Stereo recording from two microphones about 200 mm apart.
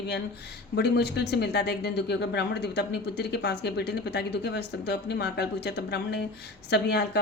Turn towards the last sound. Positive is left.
turn(degrees=55)  # may be behind; listen again after turning